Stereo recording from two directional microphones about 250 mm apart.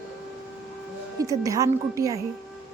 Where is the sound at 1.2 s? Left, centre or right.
Centre.